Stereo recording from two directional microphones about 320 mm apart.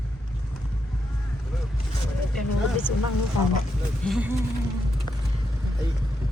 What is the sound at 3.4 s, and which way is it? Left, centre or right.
Speech, left.